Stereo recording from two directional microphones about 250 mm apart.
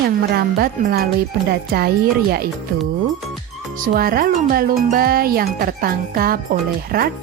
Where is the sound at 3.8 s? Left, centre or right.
Right.